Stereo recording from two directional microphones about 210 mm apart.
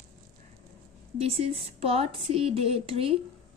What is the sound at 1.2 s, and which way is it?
A woman's voice, 30° right (ahead or behind).